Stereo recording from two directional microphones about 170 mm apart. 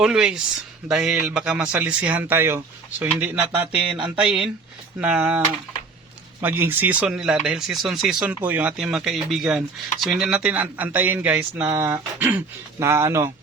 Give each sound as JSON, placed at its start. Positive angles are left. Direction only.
{"t": 0.0, "sound": "speech", "side_deg": -5}
{"t": 6.4, "sound": "speech", "side_deg": -10}